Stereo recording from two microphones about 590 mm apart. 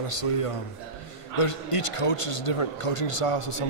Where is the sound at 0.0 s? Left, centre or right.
Left.